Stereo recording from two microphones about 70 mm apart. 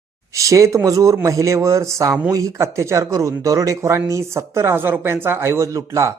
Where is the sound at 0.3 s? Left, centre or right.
Right.